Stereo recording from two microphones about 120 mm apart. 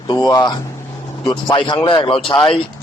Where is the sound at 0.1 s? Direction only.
35° left (ahead or behind).